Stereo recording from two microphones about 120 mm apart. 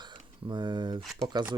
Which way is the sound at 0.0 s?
40° right (ahead or behind).